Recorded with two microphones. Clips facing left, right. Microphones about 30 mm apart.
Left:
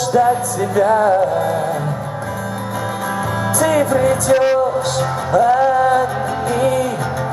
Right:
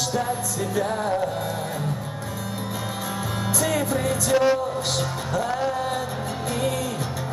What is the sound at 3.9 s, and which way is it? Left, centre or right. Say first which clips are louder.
Music: left 8 dB; centre.